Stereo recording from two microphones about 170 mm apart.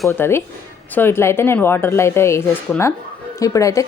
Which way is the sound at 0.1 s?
15° left (ahead or behind).